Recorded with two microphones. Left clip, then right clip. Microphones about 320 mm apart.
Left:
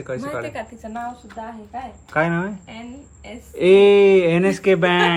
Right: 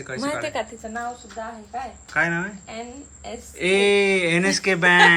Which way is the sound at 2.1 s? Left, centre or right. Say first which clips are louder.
Left 2 dB; centre.